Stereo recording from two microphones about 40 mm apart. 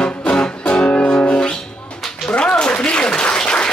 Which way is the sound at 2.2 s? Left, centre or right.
Left.